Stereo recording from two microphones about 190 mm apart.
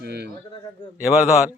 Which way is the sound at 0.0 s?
60° right (ahead or behind).